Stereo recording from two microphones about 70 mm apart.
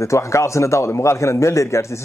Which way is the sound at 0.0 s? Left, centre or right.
Left.